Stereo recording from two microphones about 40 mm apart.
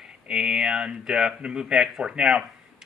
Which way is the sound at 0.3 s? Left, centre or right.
Centre.